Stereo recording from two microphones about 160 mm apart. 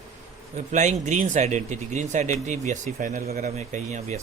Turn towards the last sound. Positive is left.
turn(degrees=-45)  # may be behind; listen again after turning